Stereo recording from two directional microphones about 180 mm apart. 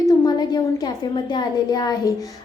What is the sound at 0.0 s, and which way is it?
A woman's voice, 20° left (ahead or behind).